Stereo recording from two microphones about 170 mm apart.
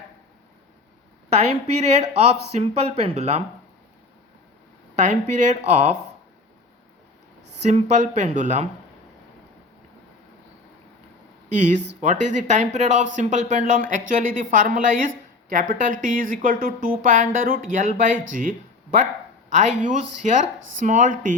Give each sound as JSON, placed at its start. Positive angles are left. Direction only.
{"t": 1.4, "sound": "a woman's voice", "side_deg": -40}
{"t": 4.9, "sound": "a woman's voice", "side_deg": -45}
{"t": 7.7, "sound": "a woman's voice", "side_deg": -40}
{"t": 12.0, "sound": "a woman's voice", "side_deg": -45}